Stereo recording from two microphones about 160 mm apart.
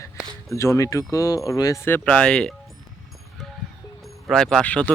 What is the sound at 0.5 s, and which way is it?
Speech, 20° left (ahead or behind).